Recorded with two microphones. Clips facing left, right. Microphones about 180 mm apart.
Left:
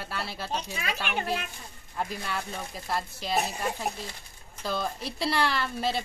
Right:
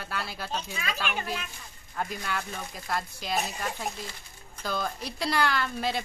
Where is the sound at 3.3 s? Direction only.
35° left (ahead or behind).